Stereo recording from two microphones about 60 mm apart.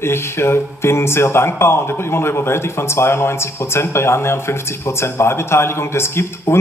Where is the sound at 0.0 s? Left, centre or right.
Left.